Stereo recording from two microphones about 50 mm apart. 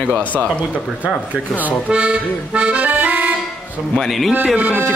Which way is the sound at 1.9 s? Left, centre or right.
Right.